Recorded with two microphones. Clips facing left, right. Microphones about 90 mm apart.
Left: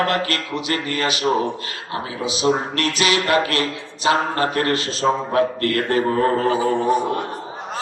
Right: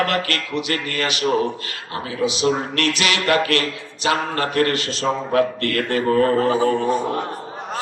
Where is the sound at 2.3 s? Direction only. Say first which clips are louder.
Left 1 dB; 30° left (ahead or behind).